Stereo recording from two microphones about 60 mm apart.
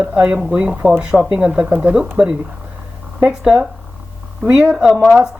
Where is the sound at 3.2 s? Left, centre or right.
Centre.